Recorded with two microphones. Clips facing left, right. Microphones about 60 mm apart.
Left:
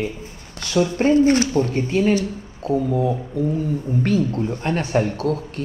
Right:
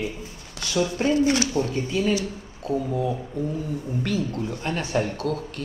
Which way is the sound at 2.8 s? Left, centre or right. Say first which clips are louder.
Left 5 dB; left.